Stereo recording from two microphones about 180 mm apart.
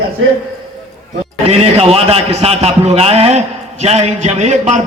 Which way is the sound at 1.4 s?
35° right (ahead or behind).